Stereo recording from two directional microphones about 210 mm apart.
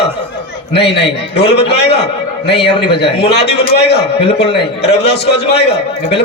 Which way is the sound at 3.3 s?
50° left (ahead or behind).